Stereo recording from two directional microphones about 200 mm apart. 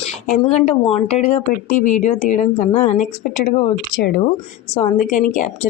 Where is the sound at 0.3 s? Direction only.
35° left (ahead or behind).